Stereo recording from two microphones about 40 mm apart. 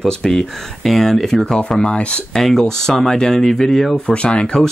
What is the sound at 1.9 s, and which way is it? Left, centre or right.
Speech, left.